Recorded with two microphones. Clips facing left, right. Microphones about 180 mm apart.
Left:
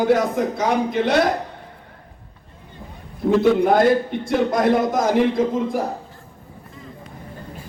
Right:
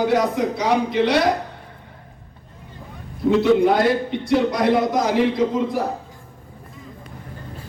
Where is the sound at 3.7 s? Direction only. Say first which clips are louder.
Left 2 dB; 50° left (ahead or behind).